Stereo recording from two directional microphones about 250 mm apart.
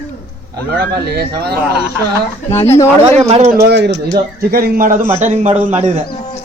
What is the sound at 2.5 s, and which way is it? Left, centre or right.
Speech, centre.